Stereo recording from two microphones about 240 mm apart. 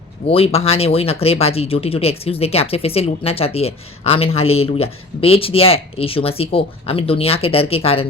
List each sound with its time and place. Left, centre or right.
0.3 s speech: left